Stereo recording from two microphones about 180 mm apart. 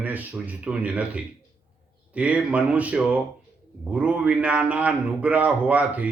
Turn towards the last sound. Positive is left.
turn(degrees=-10)  # may be behind; listen again after turning